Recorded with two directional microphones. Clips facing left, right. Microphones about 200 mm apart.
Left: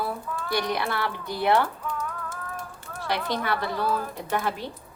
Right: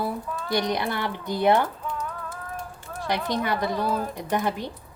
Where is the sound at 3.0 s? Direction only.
20° right (ahead or behind).